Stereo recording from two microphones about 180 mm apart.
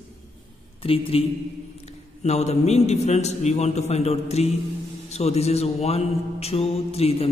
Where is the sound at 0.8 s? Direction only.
30° left (ahead or behind).